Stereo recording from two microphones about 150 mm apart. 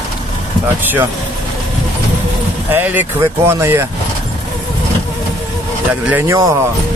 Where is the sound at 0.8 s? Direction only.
15° right (ahead or behind).